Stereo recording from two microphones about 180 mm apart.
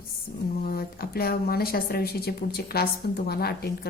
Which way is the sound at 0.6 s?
55° left (ahead or behind).